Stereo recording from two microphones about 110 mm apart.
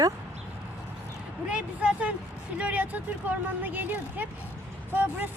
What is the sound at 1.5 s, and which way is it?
Speech, 10° right (ahead or behind).